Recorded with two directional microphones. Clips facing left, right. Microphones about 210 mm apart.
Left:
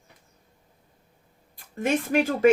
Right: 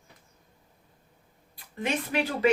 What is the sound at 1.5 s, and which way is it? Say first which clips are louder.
Speech: left 5 dB; 45° left (ahead or behind).